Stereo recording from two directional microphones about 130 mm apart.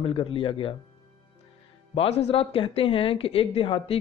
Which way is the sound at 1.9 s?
55° left (ahead or behind).